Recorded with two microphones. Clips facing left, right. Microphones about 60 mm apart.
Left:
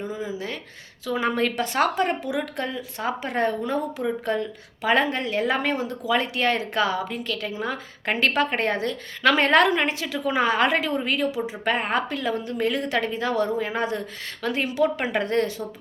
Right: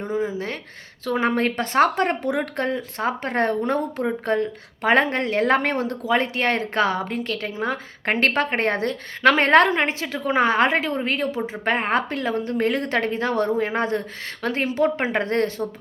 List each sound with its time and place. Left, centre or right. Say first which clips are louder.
0.0 s a sound: right 5 dB; right
1.0 s speech: right 2 dB; right
6.1 s a woman's voice: right 1 dB; right